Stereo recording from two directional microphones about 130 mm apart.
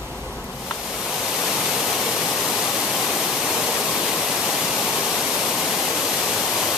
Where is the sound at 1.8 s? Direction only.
Centre (ahead or behind).